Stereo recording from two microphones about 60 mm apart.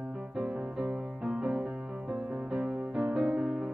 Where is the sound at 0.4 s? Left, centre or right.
Centre.